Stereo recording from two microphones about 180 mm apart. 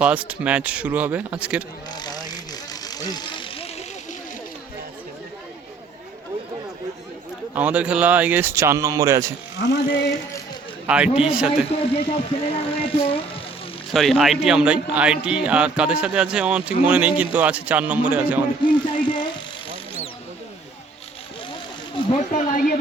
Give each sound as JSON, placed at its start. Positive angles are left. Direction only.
{"t": 0.0, "sound": "speech", "side_deg": -5}
{"t": 1.9, "sound": "mechanisms", "side_deg": 20}
{"t": 2.8, "sound": "vehicle", "side_deg": 20}
{"t": 7.5, "sound": "speech", "side_deg": -10}
{"t": 9.6, "sound": "ratchet", "side_deg": 70}
{"t": 10.8, "sound": "a man's voice", "side_deg": -5}
{"t": 11.9, "sound": "speech", "side_deg": 30}
{"t": 13.9, "sound": "a man's voice", "side_deg": 0}
{"t": 18.6, "sound": "a sound", "side_deg": 25}
{"t": 22.1, "sound": "a sound", "side_deg": 40}